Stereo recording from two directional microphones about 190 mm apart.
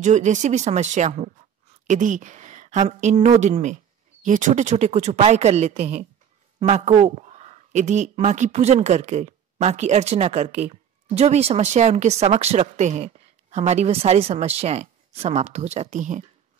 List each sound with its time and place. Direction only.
0.0 s speech: 40° right (ahead or behind)